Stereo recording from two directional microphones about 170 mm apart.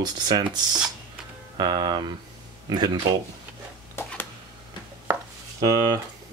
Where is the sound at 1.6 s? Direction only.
25° right (ahead or behind).